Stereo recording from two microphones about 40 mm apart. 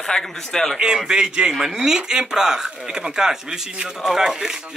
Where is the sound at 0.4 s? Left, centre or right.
Centre.